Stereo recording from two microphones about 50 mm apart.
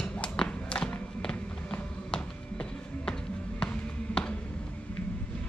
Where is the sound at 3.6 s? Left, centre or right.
Centre.